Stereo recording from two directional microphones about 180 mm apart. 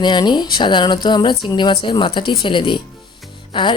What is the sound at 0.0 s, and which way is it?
A woman's voice, 25° left (ahead or behind).